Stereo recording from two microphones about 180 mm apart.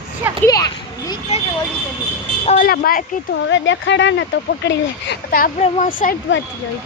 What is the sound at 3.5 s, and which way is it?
Speech, 90° left.